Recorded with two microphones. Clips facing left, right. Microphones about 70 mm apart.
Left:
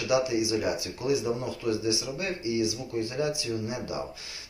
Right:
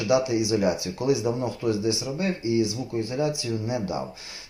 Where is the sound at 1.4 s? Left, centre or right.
Right.